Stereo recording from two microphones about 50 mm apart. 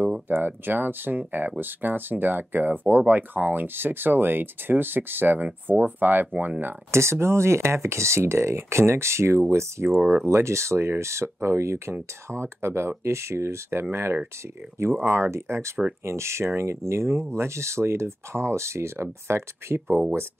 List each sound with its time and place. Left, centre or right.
0.0 s speech: right
6.9 s speech: right
9.9 s speech: right